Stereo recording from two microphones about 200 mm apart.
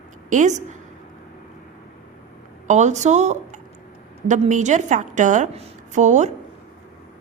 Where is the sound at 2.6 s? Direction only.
35° right (ahead or behind).